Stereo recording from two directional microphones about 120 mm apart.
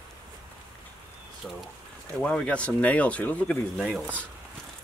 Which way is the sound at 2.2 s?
10° left (ahead or behind).